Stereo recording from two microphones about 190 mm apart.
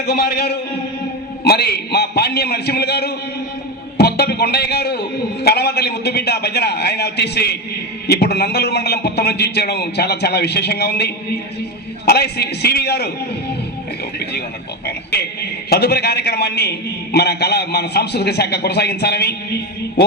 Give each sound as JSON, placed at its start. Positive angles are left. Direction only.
{"t": 0.0, "sound": "a man's voice", "side_deg": 60}
{"t": 14.8, "sound": "a sound", "side_deg": 60}
{"t": 15.7, "sound": "a man's voice", "side_deg": 60}